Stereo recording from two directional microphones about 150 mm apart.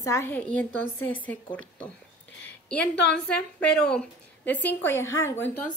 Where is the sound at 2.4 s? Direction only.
10° left (ahead or behind).